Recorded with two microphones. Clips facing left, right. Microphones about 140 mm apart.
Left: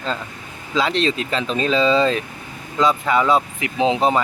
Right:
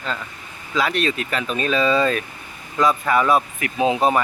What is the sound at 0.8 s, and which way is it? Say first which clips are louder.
Speech: left 2 dB; 25° left (ahead or behind).